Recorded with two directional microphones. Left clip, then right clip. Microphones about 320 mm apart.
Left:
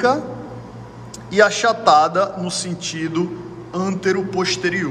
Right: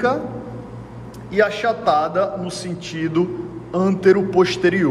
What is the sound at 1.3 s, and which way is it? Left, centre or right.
A man's voice, centre.